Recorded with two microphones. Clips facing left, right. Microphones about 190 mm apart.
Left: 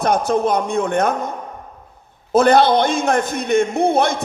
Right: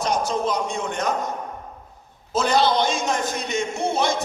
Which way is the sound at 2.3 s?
55° left (ahead or behind).